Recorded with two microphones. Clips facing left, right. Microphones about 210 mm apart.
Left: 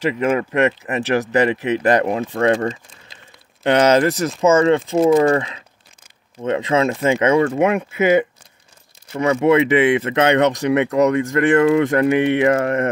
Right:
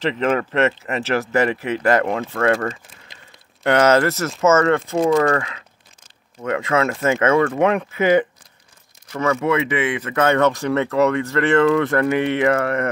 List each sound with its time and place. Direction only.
0.0 s speech: 10° left (ahead or behind)
9.1 s speech: 25° left (ahead or behind)